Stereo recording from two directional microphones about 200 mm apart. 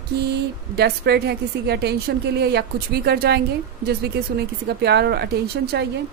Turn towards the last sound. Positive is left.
turn(degrees=-55)  # may be behind; listen again after turning